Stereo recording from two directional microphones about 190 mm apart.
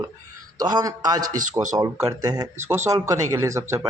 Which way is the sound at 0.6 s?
20° right (ahead or behind).